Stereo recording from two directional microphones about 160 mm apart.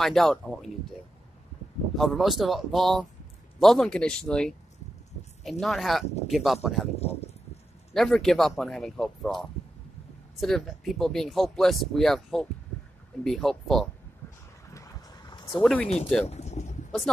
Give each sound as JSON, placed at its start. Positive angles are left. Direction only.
{"t": 0.0, "sound": "speech", "side_deg": 0}
{"t": 2.0, "sound": "speech", "side_deg": 0}
{"t": 7.0, "sound": "speech", "side_deg": 40}
{"t": 7.9, "sound": "speech", "side_deg": 0}
{"t": 10.4, "sound": "speech", "side_deg": 0}
{"t": 14.7, "sound": "a sound", "side_deg": 20}
{"t": 15.6, "sound": "speech", "side_deg": 5}
{"t": 16.3, "sound": "boat", "side_deg": 45}